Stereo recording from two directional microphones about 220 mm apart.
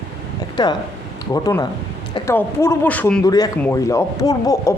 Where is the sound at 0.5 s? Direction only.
20° left (ahead or behind).